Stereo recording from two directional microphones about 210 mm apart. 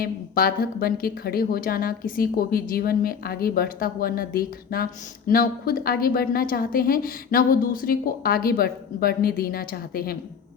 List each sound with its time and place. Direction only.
0.0 s a woman's voice: 45° left (ahead or behind)